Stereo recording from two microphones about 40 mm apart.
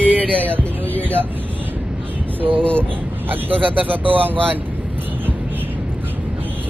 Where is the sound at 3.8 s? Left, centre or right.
Right.